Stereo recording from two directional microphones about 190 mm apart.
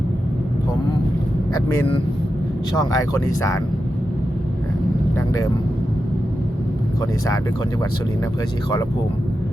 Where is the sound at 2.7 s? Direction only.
20° left (ahead or behind).